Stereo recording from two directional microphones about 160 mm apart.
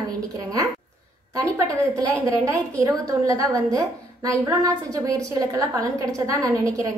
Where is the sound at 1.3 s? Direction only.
20° right (ahead or behind).